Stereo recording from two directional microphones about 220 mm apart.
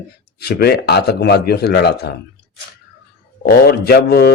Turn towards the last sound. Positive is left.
turn(degrees=45)  # may be behind; listen again after turning